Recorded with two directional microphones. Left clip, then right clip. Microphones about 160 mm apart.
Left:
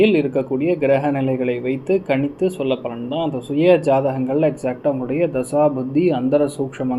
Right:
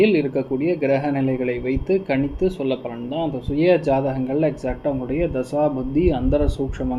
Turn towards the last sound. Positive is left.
turn(degrees=25)  # may be behind; listen again after turning